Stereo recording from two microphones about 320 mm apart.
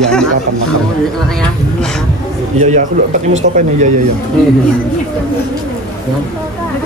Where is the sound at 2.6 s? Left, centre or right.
Right.